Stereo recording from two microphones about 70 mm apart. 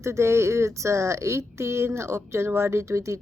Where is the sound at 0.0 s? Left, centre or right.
Right.